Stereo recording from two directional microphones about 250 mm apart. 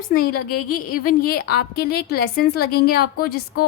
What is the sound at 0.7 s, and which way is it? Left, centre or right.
A woman's voice, left.